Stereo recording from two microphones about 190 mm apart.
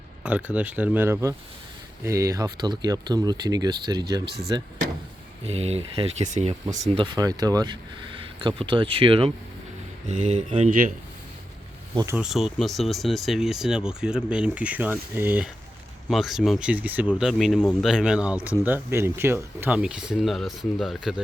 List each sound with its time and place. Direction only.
0.2 s speech: 5° right (ahead or behind); by 4.7 s 20° right (ahead or behind)
5.5 s speech: 35° right (ahead or behind)
6.8 s speech: 25° right (ahead or behind)
10.1 s speech: 40° right (ahead or behind)
11.9 s speech: 15° right (ahead or behind)
12.2 s speech: centre (ahead or behind)